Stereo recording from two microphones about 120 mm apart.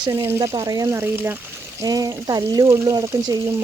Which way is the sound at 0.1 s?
20° right (ahead or behind).